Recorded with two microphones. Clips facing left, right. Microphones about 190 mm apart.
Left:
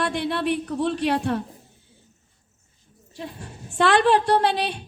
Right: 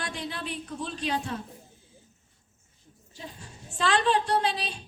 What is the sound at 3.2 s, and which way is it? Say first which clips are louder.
A woman's voice: left 7 dB; 65° left (ahead or behind).